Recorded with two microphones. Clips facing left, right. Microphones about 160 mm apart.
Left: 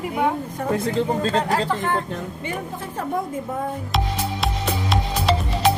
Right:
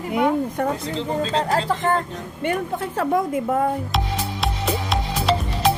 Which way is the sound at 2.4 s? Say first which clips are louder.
Right 6 dB; 75° right (ahead or behind).